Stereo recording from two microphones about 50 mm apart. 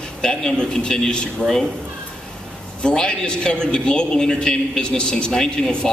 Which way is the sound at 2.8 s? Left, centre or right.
Centre.